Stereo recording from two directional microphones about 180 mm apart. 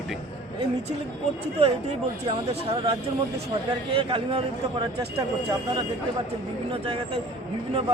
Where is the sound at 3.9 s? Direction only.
30° right (ahead or behind).